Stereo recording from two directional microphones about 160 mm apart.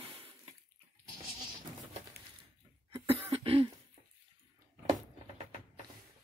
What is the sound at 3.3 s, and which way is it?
Cough, 35° right (ahead or behind).